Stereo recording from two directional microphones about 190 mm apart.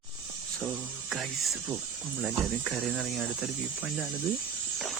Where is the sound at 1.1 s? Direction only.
Centre (ahead or behind).